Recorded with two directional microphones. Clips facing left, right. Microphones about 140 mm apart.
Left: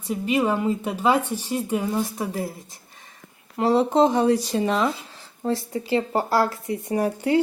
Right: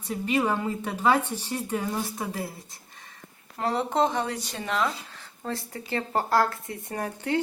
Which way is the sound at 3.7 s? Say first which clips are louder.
Left 7 dB; 30° left (ahead or behind).